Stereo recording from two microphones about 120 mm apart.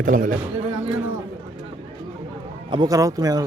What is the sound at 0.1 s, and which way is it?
Speech, 90° right.